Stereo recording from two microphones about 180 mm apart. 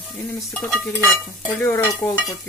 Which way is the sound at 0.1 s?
Centre (ahead or behind).